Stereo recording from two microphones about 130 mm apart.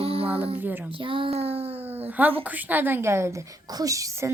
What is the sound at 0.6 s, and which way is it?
Speech, 15° right (ahead or behind).